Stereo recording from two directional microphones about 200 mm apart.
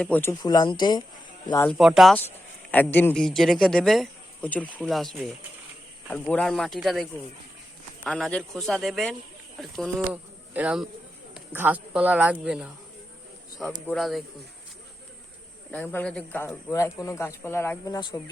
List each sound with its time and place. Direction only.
0.0 s speech: 10° left (ahead or behind)
1.6 s a man's voice: centre (ahead or behind)
15.7 s speech: 5° left (ahead or behind)